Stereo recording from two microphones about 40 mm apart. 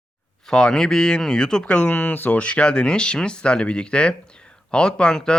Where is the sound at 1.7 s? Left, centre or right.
Left.